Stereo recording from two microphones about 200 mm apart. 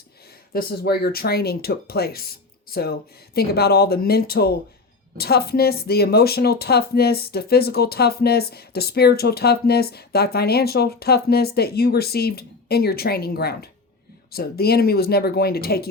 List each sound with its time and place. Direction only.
0.5 s speech: 50° left (ahead or behind)